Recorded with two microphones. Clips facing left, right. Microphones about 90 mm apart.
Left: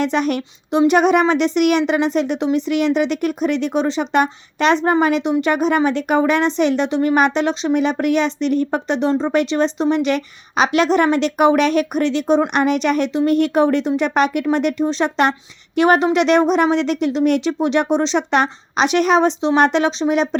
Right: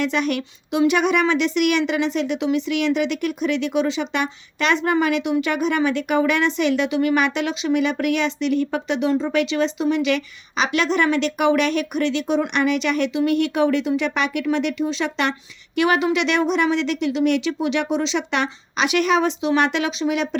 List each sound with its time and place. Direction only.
0.0 s speech: 40° left (ahead or behind)